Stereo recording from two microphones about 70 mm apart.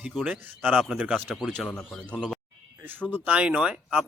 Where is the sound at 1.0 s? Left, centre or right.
Centre.